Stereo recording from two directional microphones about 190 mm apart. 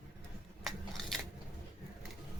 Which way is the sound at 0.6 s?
Centre (ahead or behind).